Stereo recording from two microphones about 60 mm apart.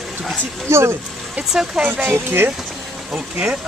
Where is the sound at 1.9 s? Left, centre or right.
Right.